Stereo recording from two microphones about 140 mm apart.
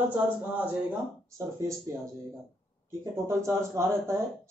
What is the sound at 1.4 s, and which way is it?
Speech, 20° right (ahead or behind).